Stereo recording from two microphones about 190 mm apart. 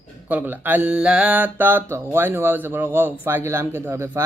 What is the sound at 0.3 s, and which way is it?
Mantra, 10° right (ahead or behind).